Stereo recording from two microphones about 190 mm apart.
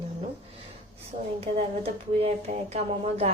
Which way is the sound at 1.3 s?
35° right (ahead or behind).